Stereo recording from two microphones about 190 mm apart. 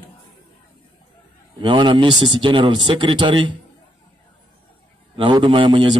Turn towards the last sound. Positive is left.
turn(degrees=-25)  # may be behind; listen again after turning